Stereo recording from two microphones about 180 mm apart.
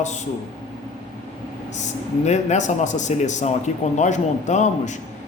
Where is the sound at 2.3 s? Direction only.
40° left (ahead or behind).